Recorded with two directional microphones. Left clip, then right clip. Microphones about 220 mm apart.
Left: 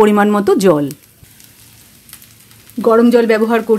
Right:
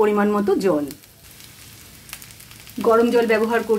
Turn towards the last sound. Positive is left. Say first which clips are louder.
# left 6 dB
turn(degrees=50)  # may be behind; listen again after turning